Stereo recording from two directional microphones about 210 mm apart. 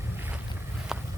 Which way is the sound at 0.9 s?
5° right (ahead or behind).